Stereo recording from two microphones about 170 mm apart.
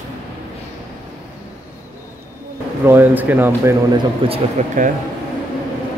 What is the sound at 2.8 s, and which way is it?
Speech, 10° right (ahead or behind).